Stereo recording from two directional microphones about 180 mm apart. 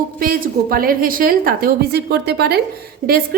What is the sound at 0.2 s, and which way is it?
A woman's voice, 50° right (ahead or behind).